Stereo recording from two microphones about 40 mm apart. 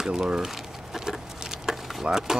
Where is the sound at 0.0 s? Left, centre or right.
Centre.